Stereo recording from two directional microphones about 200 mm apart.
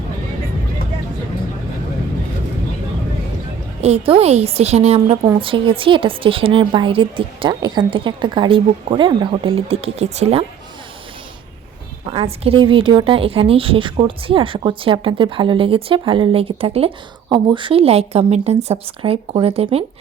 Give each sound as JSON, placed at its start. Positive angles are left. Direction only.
{"t": 3.8, "sound": "a woman's voice", "side_deg": -30}
{"t": 12.1, "sound": "a woman's voice", "side_deg": -30}